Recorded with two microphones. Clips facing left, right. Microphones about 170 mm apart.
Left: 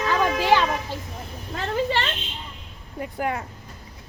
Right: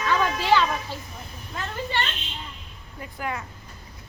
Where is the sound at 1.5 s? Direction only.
90° left.